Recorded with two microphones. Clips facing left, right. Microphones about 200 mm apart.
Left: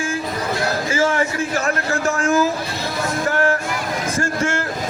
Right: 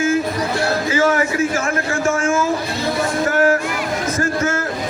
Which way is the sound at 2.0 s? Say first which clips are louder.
Left 1 dB; 35° left (ahead or behind).